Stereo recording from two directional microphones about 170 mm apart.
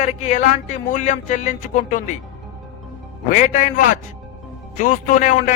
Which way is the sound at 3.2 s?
50° left (ahead or behind).